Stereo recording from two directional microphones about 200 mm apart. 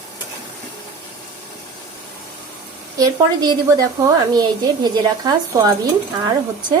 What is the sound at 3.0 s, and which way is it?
A woman's voice, 20° right (ahead or behind).